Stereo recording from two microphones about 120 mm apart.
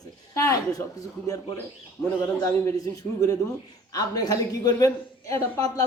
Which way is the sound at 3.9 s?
30° left (ahead or behind).